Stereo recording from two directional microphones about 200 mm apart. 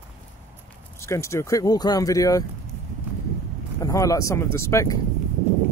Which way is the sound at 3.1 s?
5° right (ahead or behind).